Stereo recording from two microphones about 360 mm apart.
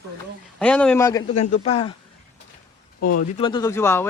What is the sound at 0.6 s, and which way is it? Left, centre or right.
A man's voice, centre.